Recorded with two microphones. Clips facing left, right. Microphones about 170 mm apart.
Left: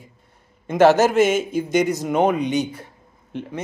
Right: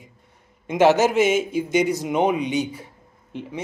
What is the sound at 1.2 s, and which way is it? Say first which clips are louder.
Mantra: left 1 dB; 45° left (ahead or behind).